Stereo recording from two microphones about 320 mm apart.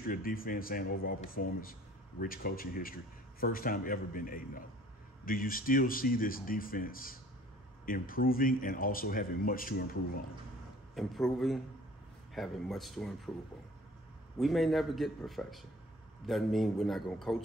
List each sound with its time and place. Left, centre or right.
0.0 s speech: left
11.0 s a man's voice: centre
14.4 s a man's voice: centre